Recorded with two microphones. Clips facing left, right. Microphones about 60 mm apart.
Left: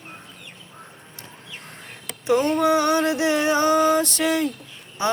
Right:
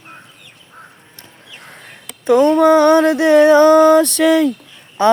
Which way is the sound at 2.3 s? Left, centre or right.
Right.